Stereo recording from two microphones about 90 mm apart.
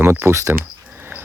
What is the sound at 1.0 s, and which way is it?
Dog, 20° right (ahead or behind).